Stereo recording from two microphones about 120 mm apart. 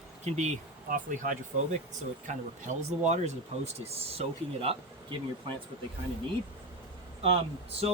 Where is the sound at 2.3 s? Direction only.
85° right; by 4.7 s 55° right (ahead or behind).